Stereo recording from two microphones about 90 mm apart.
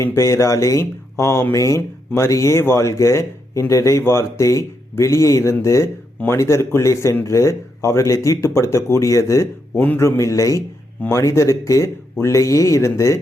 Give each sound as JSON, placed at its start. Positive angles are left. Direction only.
{"t": 0.0, "sound": "speech", "side_deg": 30}